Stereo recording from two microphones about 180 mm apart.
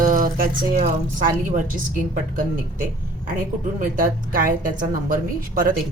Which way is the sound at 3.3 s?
50° right (ahead or behind).